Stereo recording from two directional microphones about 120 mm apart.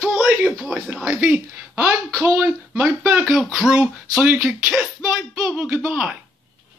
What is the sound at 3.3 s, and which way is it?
Speech, centre (ahead or behind).